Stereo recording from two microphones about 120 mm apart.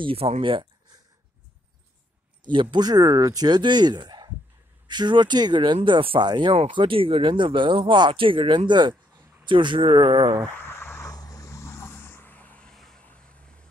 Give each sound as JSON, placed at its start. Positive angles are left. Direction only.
{"t": 0.0, "sound": "speech", "side_deg": -50}
{"t": 2.5, "sound": "speech", "side_deg": -40}
{"t": 10.5, "sound": "vehicle", "side_deg": 15}